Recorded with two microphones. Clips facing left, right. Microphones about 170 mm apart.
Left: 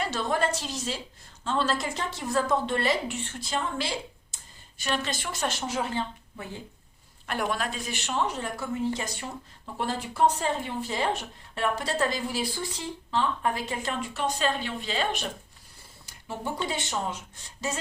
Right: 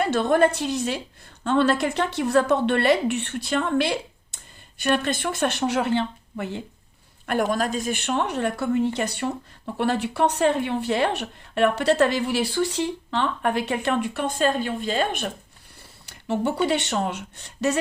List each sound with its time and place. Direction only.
0.0 s a woman's voice: 55° right (ahead or behind); by 6.6 s 75° right (ahead or behind)
7.3 s a woman's voice: 45° right (ahead or behind)
16.0 s speech: 70° right (ahead or behind)